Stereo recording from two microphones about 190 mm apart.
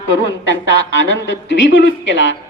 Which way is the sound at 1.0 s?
80° left.